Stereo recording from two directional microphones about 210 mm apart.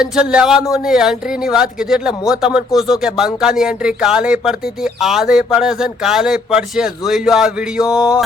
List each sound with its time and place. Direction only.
0.0 s speech: 5° right (ahead or behind)